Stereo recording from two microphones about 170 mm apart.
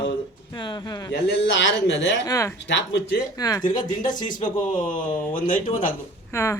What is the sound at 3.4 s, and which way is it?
Speech, 20° left (ahead or behind).